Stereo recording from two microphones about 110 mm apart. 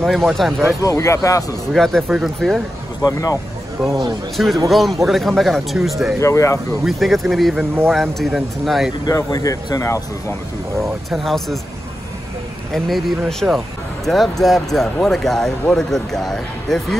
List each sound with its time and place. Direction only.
0.0 s speech: centre (ahead or behind)
0.8 s speech: 25° left (ahead or behind)
1.7 s speech: 5° left (ahead or behind)
3.0 s speech: 35° left (ahead or behind)
4.6 s speech: centre (ahead or behind)
6.1 s speech: 25° left (ahead or behind)
6.8 s speech: centre (ahead or behind)
9.0 s speech: 30° left (ahead or behind)
11.1 s speech: centre (ahead or behind)
12.7 s speech: centre (ahead or behind)